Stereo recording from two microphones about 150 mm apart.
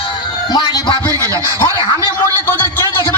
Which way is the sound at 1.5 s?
25° right (ahead or behind).